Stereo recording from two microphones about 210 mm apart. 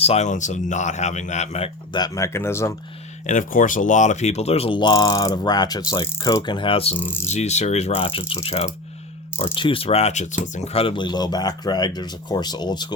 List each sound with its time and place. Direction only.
0.0 s speech: 30° left (ahead or behind); by 2.7 s 10° left (ahead or behind)
3.2 s speech: 40° left (ahead or behind)
7.0 s speech: 10° left (ahead or behind)
7.3 s speech: 30° left (ahead or behind)